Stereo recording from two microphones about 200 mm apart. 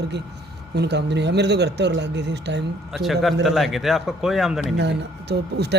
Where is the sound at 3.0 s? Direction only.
Centre (ahead or behind).